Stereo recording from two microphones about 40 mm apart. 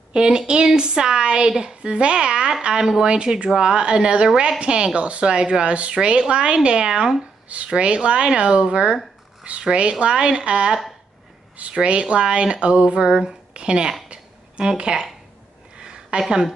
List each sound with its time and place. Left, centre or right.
0.1 s speech: right
7.4 s speech: right
14.0 s a sound: right